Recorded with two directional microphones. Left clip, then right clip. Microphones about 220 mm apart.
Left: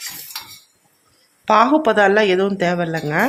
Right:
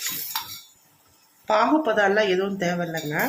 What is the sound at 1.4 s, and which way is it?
Speech, 35° left (ahead or behind).